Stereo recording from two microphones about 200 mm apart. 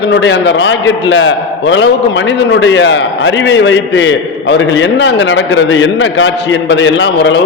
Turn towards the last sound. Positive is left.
turn(degrees=65)  # may be behind; listen again after turning